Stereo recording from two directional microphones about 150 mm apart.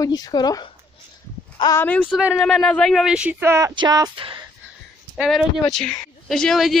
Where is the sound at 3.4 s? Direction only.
20° right (ahead or behind).